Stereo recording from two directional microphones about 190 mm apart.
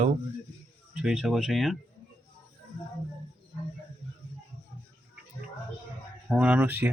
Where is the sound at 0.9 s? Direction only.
5° right (ahead or behind).